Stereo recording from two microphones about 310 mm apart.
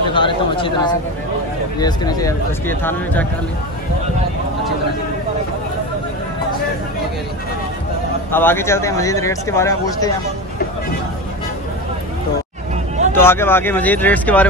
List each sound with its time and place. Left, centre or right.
0.1 s speech: centre
8.3 s speech: centre
13.1 s speech: centre